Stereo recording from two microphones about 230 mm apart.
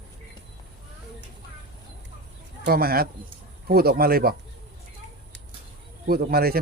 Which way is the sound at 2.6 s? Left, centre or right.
Right.